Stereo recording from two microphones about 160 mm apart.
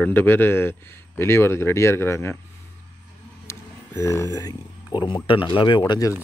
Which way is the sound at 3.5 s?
20° left (ahead or behind).